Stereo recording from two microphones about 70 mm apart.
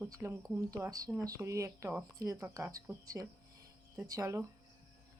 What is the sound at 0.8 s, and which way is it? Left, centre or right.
Speech, right.